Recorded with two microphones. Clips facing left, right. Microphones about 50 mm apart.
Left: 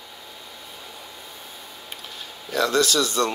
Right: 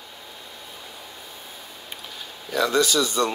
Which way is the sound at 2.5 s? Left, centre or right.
Centre.